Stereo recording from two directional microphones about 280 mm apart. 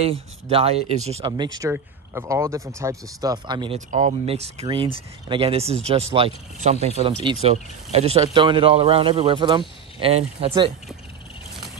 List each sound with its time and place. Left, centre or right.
0.0 s speech: centre